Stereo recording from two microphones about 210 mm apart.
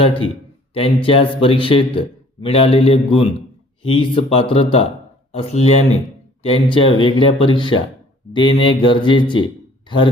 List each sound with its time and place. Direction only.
0.0 s a man's voice: 25° left (ahead or behind)